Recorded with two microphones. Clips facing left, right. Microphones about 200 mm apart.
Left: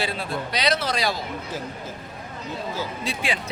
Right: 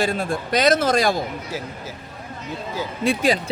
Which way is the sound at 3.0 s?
45° right (ahead or behind).